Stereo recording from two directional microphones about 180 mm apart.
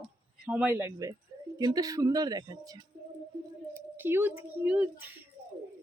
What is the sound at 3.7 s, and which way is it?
A woman's voice, 10° right (ahead or behind).